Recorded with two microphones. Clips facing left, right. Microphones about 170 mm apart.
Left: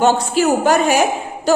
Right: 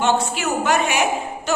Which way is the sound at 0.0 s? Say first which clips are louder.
Left 6 dB; 35° left (ahead or behind).